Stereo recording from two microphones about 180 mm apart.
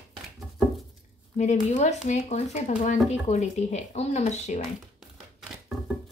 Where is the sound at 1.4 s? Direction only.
40° left (ahead or behind).